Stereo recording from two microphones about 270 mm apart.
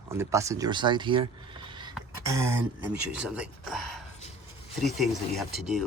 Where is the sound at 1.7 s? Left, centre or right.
Centre.